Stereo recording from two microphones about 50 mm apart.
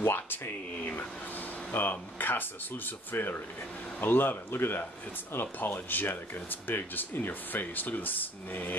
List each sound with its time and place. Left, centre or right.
0.0 s speech: left
0.7 s a sound: left
1.7 s speech: left